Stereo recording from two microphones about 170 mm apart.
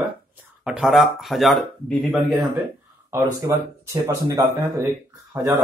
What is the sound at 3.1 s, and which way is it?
Speech, 15° right (ahead or behind).